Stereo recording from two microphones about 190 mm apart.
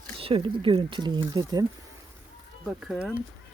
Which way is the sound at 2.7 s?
5° right (ahead or behind).